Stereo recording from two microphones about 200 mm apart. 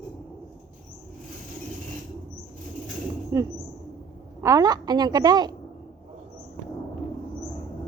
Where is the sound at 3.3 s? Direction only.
15° right (ahead or behind).